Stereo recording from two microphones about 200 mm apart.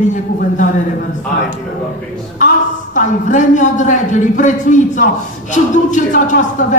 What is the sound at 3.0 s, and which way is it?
Speech, 40° left (ahead or behind).